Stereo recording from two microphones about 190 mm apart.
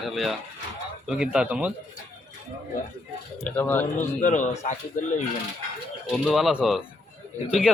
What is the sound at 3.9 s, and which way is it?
Speech, 40° left (ahead or behind).